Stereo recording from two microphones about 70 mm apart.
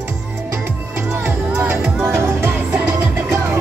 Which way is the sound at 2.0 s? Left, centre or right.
Right.